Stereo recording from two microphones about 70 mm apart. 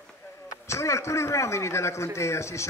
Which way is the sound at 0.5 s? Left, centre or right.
Left.